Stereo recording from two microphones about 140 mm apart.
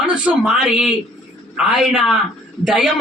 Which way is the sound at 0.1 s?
5° right (ahead or behind).